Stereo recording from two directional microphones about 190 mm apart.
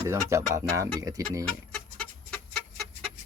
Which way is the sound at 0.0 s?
15° right (ahead or behind).